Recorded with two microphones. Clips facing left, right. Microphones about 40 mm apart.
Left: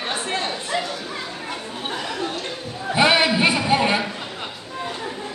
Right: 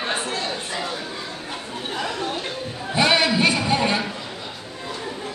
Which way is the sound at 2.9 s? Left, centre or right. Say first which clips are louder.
Left 2 dB; centre.